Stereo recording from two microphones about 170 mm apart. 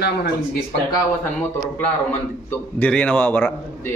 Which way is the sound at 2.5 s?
10° left (ahead or behind).